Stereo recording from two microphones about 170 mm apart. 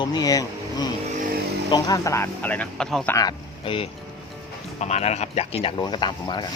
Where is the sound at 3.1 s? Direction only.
25° left (ahead or behind).